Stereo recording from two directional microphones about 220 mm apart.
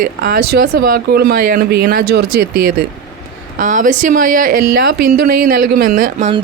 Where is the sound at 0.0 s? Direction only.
40° right (ahead or behind).